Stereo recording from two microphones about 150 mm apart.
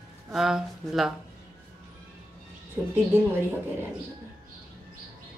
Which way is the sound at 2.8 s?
20° right (ahead or behind).